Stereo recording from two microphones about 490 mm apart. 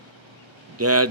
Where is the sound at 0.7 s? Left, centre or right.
Right.